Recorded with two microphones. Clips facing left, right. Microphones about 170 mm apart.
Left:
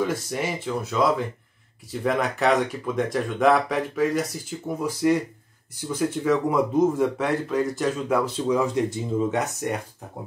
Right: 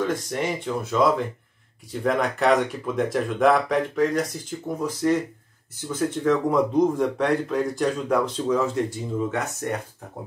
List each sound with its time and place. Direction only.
0.0 s speech: 5° left (ahead or behind)
8.5 s speech: 15° left (ahead or behind)